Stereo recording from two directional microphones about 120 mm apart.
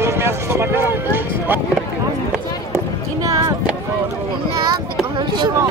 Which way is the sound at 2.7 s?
25° right (ahead or behind).